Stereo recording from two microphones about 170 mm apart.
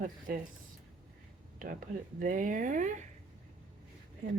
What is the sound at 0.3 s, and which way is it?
Speech, 60° right (ahead or behind).